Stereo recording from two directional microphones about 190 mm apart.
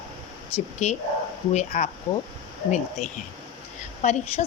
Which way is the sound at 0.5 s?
35° left (ahead or behind).